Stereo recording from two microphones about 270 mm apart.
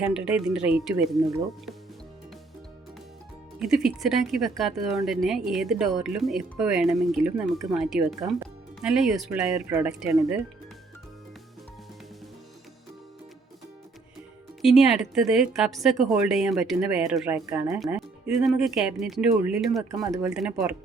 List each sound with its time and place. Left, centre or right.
0.0 s a woman's voice: centre
3.6 s a woman's voice: centre
14.6 s a woman's voice: centre